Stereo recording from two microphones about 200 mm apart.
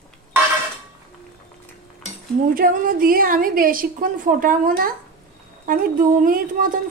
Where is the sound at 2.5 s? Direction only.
45° right (ahead or behind).